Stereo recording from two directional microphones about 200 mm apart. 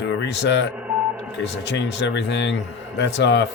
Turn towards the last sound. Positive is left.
turn(degrees=60)  # may be behind; listen again after turning